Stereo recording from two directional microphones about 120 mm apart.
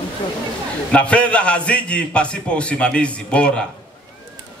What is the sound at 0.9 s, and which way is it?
A man's voice, 10° left (ahead or behind).